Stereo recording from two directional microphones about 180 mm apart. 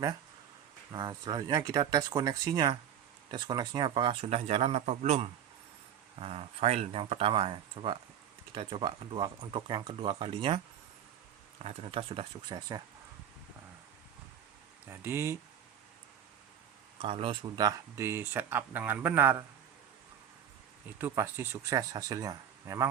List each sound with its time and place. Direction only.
0.9 s a man's voice: 25° right (ahead or behind)
11.6 s a man's voice: 35° right (ahead or behind)
14.8 s speech: 15° right (ahead or behind)
17.0 s speech: 30° right (ahead or behind); by 19.5 s 10° right (ahead or behind)
21.0 s speech: 15° right (ahead or behind)